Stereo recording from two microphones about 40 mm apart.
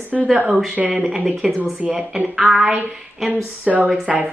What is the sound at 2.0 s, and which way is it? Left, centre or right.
Speech, centre.